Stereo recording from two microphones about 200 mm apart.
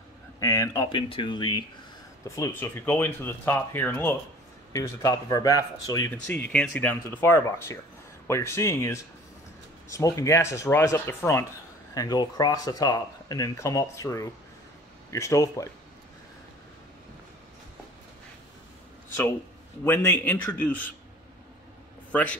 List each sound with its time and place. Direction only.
0.4 s speech: 15° left (ahead or behind)
19.8 s speech: 10° left (ahead or behind)
22.1 s a man's voice: 5° left (ahead or behind)